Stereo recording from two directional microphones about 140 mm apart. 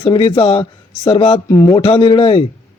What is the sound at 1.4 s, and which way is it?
Speech, 20° left (ahead or behind).